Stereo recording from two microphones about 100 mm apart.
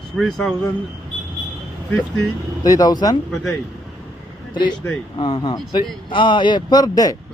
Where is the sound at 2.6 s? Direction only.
40° left (ahead or behind).